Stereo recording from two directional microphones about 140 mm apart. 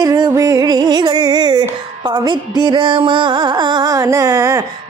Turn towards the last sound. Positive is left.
turn(degrees=-20)  # may be behind; listen again after turning